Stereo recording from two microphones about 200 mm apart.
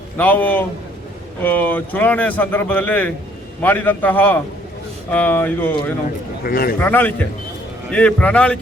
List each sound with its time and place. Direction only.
0.2 s a man's voice: 10° left (ahead or behind)
6.4 s a man's voice: 50° left (ahead or behind)
6.7 s a man's voice: 10° left (ahead or behind)